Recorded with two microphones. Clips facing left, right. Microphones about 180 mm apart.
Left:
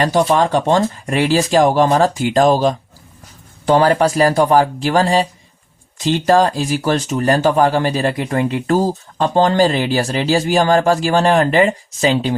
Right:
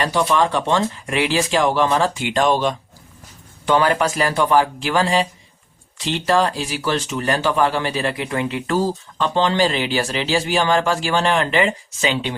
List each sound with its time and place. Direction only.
0.0 s speech: 45° left (ahead or behind)